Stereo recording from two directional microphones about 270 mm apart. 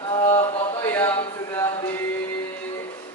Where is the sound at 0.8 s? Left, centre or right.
Centre.